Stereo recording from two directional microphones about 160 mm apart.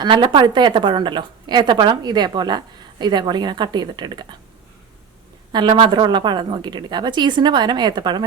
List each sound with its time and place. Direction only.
0.0 s a woman's voice: 30° right (ahead or behind)
5.5 s a woman's voice: 30° right (ahead or behind)